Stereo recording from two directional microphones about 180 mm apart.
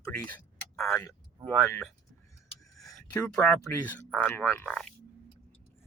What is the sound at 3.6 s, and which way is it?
Speech, 10° left (ahead or behind).